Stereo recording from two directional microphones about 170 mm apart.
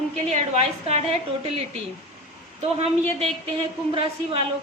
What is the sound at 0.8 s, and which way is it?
Speech, 40° right (ahead or behind).